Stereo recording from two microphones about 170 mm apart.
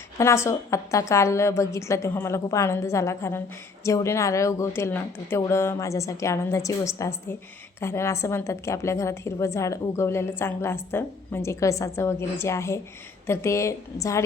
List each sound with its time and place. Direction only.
0.2 s a woman's voice: 15° left (ahead or behind)